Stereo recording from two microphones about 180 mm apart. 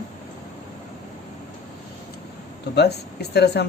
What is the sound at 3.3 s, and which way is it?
Speech, 70° left (ahead or behind).